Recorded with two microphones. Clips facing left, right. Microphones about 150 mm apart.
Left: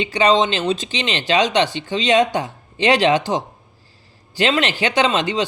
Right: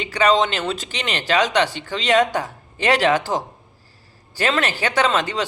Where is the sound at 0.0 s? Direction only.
20° left (ahead or behind).